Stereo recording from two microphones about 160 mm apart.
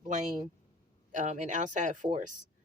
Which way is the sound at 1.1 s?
50° right (ahead or behind).